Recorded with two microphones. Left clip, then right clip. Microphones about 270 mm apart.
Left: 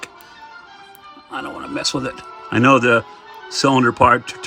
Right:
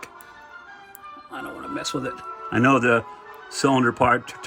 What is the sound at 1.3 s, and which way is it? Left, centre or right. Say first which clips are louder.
Speech: left 6 dB; centre.